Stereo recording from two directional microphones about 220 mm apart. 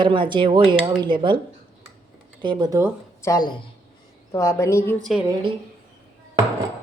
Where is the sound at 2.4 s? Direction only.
20° right (ahead or behind).